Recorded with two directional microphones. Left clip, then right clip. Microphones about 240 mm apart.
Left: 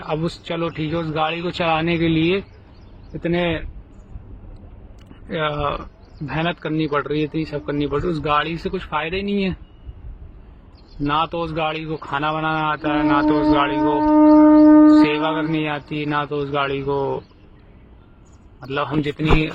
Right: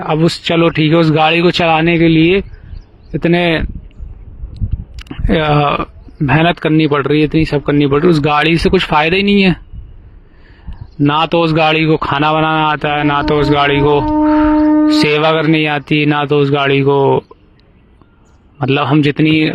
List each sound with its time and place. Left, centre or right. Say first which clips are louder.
0.0 s speech: right 11 dB; right
4.9 s speech: right 10 dB; right
11.0 s speech: right 9 dB; right
14.0 s shofar: even; centre
15.2 s speech: right 10 dB; right
18.6 s speech: right 10 dB; right